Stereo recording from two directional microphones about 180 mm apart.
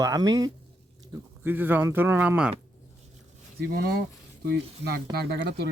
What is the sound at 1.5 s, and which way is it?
Speech, 10° right (ahead or behind).